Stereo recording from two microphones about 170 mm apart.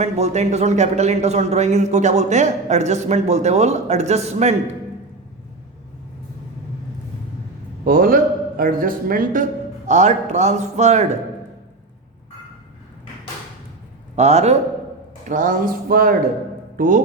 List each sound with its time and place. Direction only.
0.0 s speech: 40° right (ahead or behind)
7.9 s a man's voice: 55° right (ahead or behind); by 11.2 s 40° right (ahead or behind)
14.2 s speech: 40° right (ahead or behind)
15.3 s a sound: 50° right (ahead or behind)
16.7 s speech: 50° right (ahead or behind)